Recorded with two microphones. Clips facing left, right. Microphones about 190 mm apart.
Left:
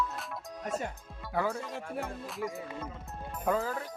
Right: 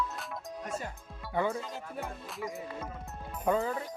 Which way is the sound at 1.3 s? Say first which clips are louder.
Right 1 dB; centre (ahead or behind).